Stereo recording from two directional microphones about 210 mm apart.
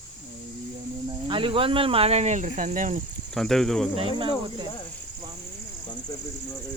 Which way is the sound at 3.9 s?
25° right (ahead or behind).